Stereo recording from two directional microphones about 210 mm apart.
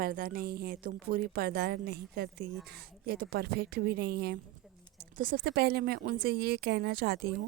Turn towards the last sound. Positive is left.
turn(degrees=-45)  # may be behind; listen again after turning